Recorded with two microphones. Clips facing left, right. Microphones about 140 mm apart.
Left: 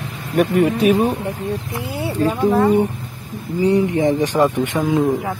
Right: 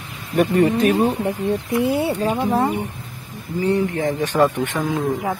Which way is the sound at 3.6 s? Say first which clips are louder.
Left 4 dB; 15° left (ahead or behind).